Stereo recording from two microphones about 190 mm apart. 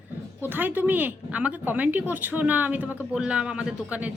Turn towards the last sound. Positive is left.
turn(degrees=-5)  # may be behind; listen again after turning